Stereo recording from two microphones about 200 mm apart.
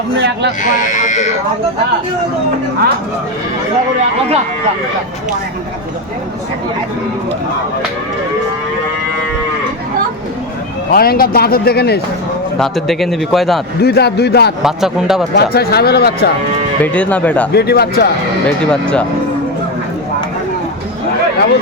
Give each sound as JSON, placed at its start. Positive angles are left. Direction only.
{"t": 0.2, "sound": "speech", "side_deg": -60}
{"t": 0.9, "sound": "speech", "side_deg": 40}
{"t": 10.9, "sound": "speech", "side_deg": 50}
{"t": 12.5, "sound": "a man's voice", "side_deg": 0}
{"t": 13.8, "sound": "a man's voice", "side_deg": 55}
{"t": 14.6, "sound": "a man's voice", "side_deg": 0}
{"t": 15.4, "sound": "speech", "side_deg": 50}
{"t": 16.8, "sound": "speech", "side_deg": 5}
{"t": 17.5, "sound": "speech", "side_deg": 55}
{"t": 18.6, "sound": "a man's voice", "side_deg": 5}